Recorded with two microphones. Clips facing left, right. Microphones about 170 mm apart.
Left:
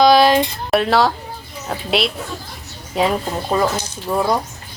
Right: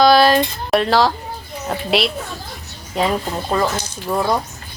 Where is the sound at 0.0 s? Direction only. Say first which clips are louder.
Even; 15° left (ahead or behind).